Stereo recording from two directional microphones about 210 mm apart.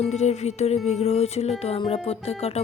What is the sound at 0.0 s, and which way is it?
Music, 30° left (ahead or behind).